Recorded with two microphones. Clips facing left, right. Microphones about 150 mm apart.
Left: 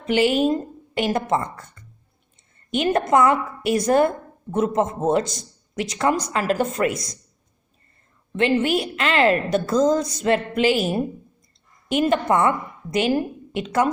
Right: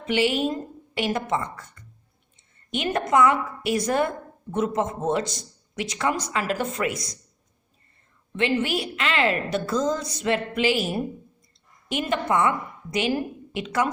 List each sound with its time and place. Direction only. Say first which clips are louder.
0.0 s a woman's voice: left 4 dB; 45° left (ahead or behind)
2.7 s a woman's voice: left 3 dB; 40° left (ahead or behind)
8.4 s a woman's voice: left 4 dB; 45° left (ahead or behind)